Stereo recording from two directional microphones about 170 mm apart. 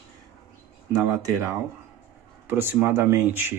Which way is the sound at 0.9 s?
20° right (ahead or behind).